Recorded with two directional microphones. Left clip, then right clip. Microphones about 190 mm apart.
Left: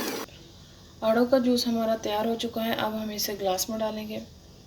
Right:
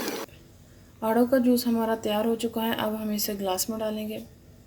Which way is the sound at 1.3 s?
35° right (ahead or behind).